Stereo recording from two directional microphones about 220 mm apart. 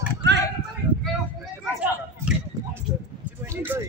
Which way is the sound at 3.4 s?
10° right (ahead or behind).